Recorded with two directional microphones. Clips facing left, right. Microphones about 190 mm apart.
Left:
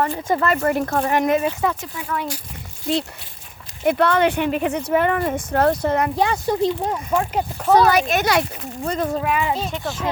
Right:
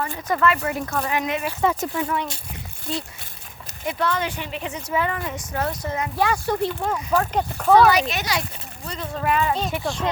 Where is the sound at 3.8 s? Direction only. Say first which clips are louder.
Left 8 dB; 60° left (ahead or behind).